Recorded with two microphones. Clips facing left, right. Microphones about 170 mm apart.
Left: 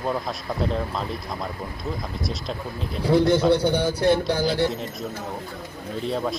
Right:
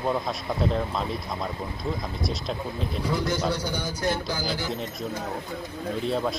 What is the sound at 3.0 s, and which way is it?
Speech, 60° left (ahead or behind).